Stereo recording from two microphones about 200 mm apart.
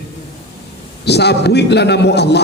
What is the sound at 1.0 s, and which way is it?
A man's voice, 55° left (ahead or behind).